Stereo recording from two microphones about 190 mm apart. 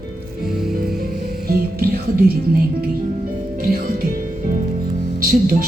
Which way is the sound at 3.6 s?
50° right (ahead or behind).